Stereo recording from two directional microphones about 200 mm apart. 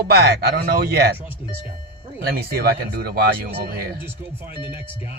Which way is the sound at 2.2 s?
50° right (ahead or behind).